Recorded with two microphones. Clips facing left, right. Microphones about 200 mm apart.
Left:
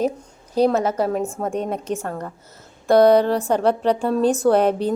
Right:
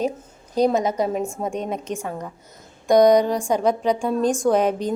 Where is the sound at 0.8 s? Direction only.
5° left (ahead or behind).